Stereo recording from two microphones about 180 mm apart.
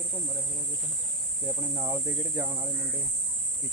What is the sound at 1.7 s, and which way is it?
Speech, 15° right (ahead or behind).